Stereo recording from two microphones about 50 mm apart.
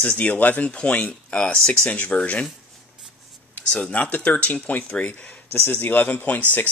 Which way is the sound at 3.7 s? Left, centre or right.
Left.